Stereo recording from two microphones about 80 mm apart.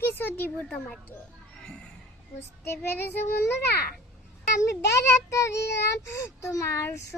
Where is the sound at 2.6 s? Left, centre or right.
Left.